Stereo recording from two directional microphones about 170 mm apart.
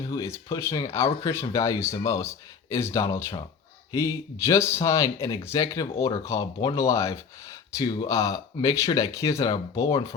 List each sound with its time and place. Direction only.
0.0 s speech: 15° left (ahead or behind)